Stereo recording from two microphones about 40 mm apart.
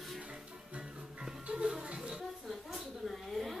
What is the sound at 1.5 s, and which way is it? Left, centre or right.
Music, right.